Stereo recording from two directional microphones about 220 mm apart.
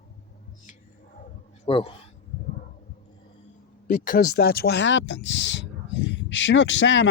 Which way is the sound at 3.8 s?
40° left (ahead or behind).